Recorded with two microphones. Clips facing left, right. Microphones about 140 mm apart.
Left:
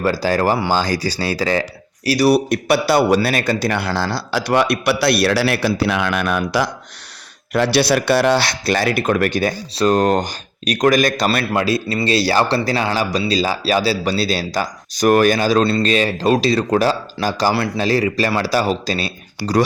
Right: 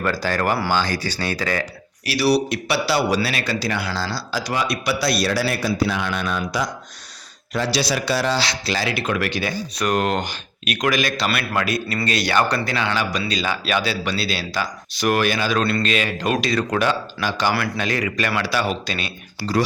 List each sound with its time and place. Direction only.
0.0 s speech: 35° left (ahead or behind)
2.0 s a man's voice: 45° left (ahead or behind); by 6.7 s 70° left (ahead or behind)
7.5 s a man's voice: 60° left (ahead or behind); by 9.5 s 45° left (ahead or behind)
9.7 s speech: 30° left (ahead or behind)
11.5 s speech: 30° left (ahead or behind)